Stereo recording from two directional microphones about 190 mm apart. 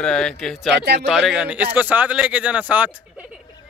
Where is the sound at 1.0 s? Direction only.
Centre (ahead or behind).